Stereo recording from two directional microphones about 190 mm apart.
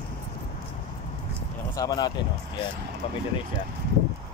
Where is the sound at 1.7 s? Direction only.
20° left (ahead or behind).